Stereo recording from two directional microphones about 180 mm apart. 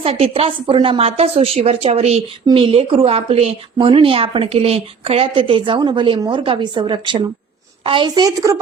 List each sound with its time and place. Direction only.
0.0 s a woman's voice: 35° right (ahead or behind)